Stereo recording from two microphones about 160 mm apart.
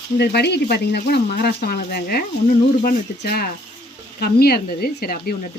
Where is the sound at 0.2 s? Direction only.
90° left.